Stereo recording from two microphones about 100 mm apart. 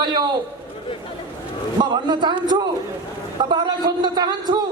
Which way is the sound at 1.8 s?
50° right (ahead or behind).